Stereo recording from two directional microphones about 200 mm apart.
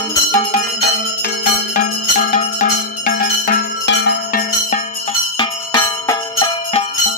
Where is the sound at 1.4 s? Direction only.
45° left (ahead or behind).